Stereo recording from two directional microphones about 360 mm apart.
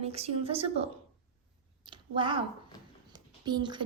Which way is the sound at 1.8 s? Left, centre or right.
Centre.